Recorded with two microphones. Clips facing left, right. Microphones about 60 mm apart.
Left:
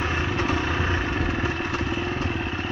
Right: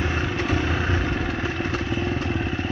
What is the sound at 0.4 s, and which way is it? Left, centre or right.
Vehicle, left.